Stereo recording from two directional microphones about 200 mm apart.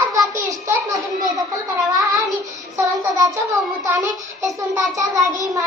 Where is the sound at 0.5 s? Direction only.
15° right (ahead or behind).